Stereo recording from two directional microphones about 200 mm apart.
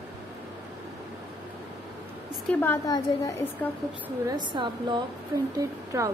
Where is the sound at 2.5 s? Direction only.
10° left (ahead or behind).